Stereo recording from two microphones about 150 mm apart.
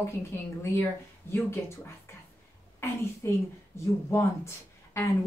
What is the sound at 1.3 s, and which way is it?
Speech, 15° left (ahead or behind).